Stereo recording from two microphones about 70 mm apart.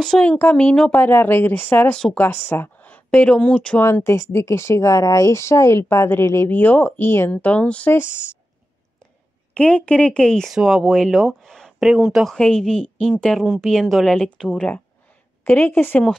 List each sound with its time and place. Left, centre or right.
0.4 s a woman's voice: left
0.9 s speech: left
3.8 s speech: left
6.5 s speech: left
7.1 s speech: left
7.3 s speech: centre
9.5 s a woman's voice: centre
10.5 s speech: centre
11.4 s a sound: centre
11.8 s speech: centre
12.4 s a woman's voice: centre
14.4 s a woman's voice: centre; by 16.0 s left